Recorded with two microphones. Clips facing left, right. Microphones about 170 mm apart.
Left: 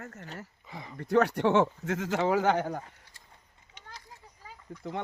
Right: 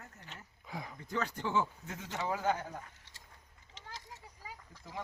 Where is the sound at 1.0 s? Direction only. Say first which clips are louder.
Left 14 dB; 70° left (ahead or behind).